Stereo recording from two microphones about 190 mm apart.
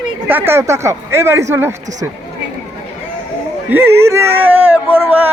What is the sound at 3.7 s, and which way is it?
Speech, 10° right (ahead or behind).